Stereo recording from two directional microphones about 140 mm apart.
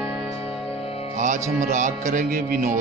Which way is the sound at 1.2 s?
65° right (ahead or behind).